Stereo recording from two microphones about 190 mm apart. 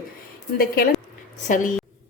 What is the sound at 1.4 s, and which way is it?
Speech, 45° left (ahead or behind).